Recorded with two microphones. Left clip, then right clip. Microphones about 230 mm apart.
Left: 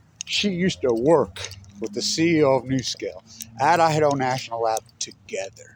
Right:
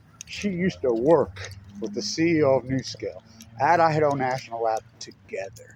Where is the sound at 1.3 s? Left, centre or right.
Left.